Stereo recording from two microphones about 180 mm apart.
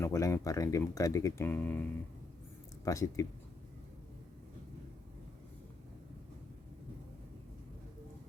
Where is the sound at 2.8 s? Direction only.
20° left (ahead or behind).